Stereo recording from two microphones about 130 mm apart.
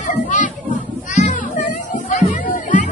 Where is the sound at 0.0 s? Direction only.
75° left (ahead or behind).